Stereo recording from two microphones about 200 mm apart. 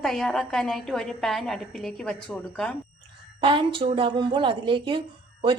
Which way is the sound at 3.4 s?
25° right (ahead or behind).